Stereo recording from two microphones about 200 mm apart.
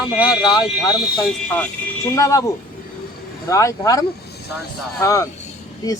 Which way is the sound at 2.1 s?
15° left (ahead or behind).